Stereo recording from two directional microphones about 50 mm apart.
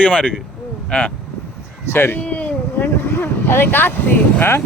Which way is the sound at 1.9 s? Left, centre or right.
Left.